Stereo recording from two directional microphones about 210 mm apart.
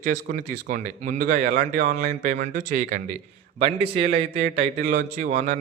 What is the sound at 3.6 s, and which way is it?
A man's voice, 30° right (ahead or behind).